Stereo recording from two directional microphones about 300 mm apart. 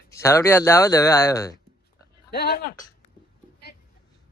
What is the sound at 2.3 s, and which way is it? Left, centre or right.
Speech, left.